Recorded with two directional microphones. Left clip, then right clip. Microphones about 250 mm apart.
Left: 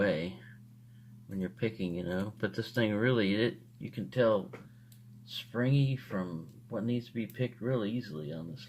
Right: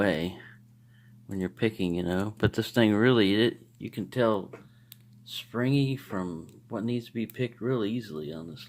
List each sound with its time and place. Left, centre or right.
0.0 s speech: right